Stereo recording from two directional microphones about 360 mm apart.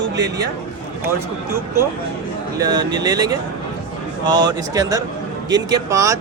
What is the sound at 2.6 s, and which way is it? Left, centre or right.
Speech, centre.